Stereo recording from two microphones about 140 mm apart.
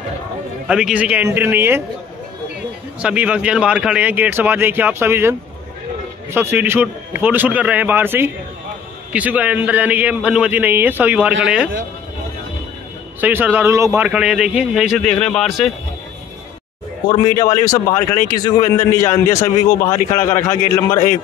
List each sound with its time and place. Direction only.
0.7 s a man's voice: 5° right (ahead or behind)
3.0 s a man's voice: 10° right (ahead or behind)
6.3 s a man's voice: 15° right (ahead or behind)
13.2 s a man's voice: 15° right (ahead or behind)
15.0 s speech: 5° left (ahead or behind)
17.1 s a man's voice: 30° left (ahead or behind)